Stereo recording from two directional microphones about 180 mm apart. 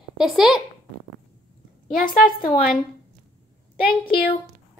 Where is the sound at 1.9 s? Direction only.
50° left (ahead or behind).